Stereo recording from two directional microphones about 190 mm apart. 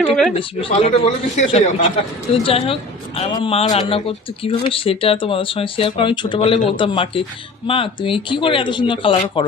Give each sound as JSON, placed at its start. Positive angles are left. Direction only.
{"t": 0.0, "sound": "speech", "side_deg": 0}
{"t": 0.3, "sound": "speech", "side_deg": 30}